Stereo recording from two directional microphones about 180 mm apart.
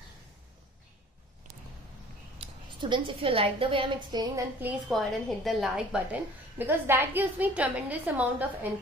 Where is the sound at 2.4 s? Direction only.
25° right (ahead or behind).